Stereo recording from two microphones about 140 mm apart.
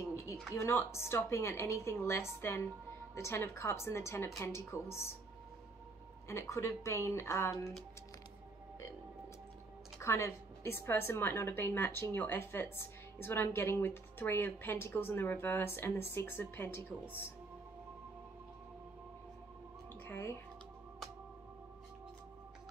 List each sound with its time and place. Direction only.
0.6 s a woman's voice: 20° left (ahead or behind)
6.2 s speech: 20° left (ahead or behind)
9.9 s a woman's voice: 20° left (ahead or behind)
20.1 s speech: 20° left (ahead or behind)